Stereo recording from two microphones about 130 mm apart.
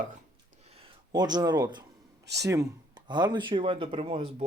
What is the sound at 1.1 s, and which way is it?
Speech, 30° right (ahead or behind).